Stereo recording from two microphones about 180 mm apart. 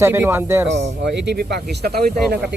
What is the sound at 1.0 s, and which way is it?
Speech, 70° right (ahead or behind).